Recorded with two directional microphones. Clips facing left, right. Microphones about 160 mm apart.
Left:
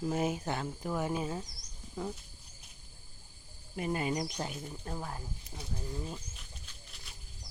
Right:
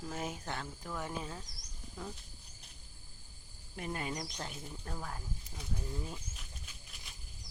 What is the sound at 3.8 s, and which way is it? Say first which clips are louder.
Speech: left 6 dB; 5° left (ahead or behind).